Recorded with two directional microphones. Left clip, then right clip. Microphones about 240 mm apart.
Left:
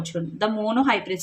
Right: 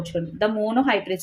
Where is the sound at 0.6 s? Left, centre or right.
Centre.